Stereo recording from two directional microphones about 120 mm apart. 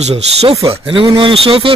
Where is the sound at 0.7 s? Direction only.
50° right (ahead or behind).